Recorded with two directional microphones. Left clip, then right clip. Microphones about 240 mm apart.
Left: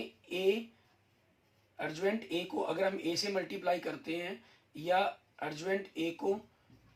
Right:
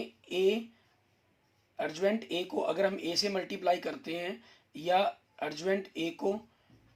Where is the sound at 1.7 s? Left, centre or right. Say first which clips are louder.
Right 4 dB; right.